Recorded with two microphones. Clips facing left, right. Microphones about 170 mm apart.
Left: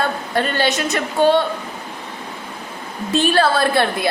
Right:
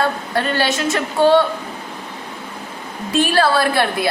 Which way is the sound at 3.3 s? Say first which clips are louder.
Even; 25° left (ahead or behind).